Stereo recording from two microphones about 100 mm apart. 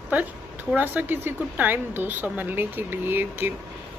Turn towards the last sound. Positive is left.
turn(degrees=-20)  # may be behind; listen again after turning